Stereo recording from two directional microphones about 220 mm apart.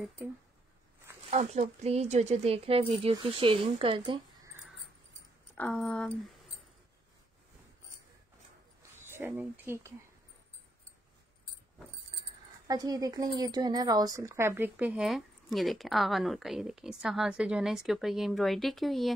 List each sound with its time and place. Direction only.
1.3 s a woman's voice: 30° right (ahead or behind)
5.6 s speech: 5° left (ahead or behind)
8.9 s speech: 10° right (ahead or behind)
12.1 s keys jangling: 20° right (ahead or behind)
12.6 s speech: 15° right (ahead or behind); by 19.1 s centre (ahead or behind)